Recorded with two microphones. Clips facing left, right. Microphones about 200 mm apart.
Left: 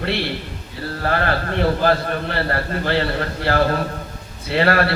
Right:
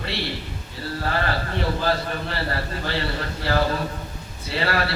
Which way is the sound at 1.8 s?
60° left (ahead or behind).